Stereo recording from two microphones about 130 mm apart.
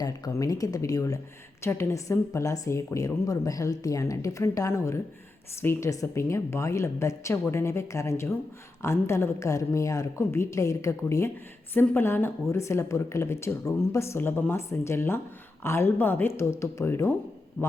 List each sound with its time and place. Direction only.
0.0 s speech: 25° left (ahead or behind)